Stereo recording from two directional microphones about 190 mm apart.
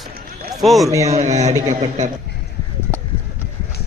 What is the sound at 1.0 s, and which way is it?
A man's voice, 35° right (ahead or behind).